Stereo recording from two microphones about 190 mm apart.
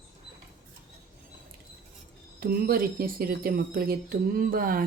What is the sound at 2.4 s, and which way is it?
Speech, 50° right (ahead or behind).